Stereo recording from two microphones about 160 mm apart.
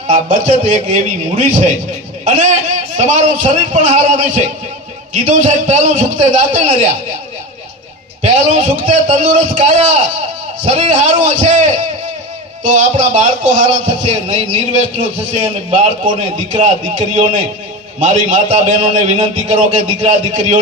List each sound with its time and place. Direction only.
0.1 s a man's voice: 50° right (ahead or behind)
8.2 s a man's voice: 50° right (ahead or behind)